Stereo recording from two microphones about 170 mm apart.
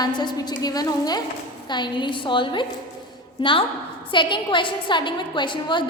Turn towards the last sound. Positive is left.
turn(degrees=25)  # may be behind; listen again after turning